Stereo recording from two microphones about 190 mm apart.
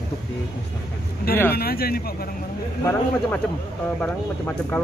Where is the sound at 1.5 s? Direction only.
55° left (ahead or behind).